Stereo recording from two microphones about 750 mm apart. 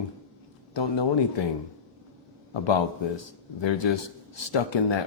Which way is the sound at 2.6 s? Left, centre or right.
Left.